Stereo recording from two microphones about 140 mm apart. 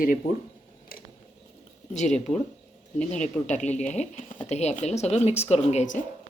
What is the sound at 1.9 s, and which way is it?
Speech, 60° left (ahead or behind).